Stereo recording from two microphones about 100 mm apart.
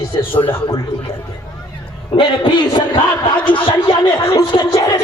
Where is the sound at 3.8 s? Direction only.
65° left (ahead or behind).